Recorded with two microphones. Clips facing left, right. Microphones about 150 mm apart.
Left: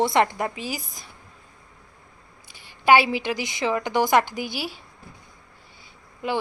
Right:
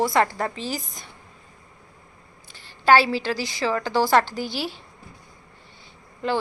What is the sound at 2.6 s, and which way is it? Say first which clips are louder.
A woman's voice: even; 15° left (ahead or behind).